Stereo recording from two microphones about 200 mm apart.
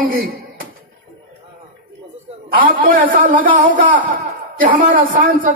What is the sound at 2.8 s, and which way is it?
A man's voice, 45° right (ahead or behind).